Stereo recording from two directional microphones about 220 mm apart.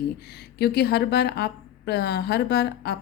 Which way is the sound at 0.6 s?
45° left (ahead or behind).